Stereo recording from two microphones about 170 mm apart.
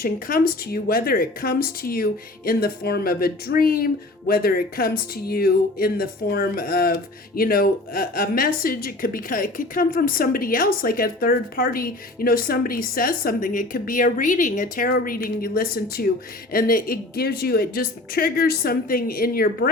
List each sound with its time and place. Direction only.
0.0 s speech: 60° left (ahead or behind)